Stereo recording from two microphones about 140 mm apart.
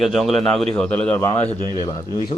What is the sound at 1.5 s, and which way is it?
Speech, 35° right (ahead or behind).